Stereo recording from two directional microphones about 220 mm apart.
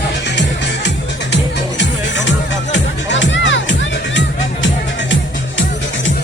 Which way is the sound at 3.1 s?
55° left (ahead or behind).